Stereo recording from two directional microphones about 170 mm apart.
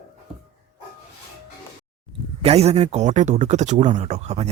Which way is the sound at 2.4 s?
35° right (ahead or behind).